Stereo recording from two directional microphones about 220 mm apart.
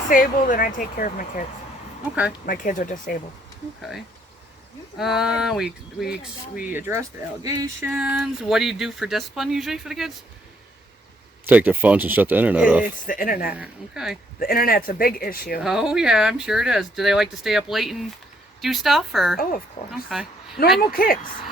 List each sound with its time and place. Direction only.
0.1 s speech: 35° left (ahead or behind)
2.5 s speech: 35° left (ahead or behind)
3.8 s speech: centre (ahead or behind); by 7.9 s 15° right (ahead or behind)
7.9 s speech: 5° right (ahead or behind)
11.4 s speech: 10° right (ahead or behind)
12.8 s speech: 40° left (ahead or behind)
13.6 s speech: centre (ahead or behind)
14.3 s speech: 40° left (ahead or behind)
15.6 s speech: centre (ahead or behind)
20.9 s speech: 40° left (ahead or behind)